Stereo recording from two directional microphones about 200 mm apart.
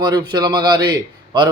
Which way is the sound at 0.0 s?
20° right (ahead or behind).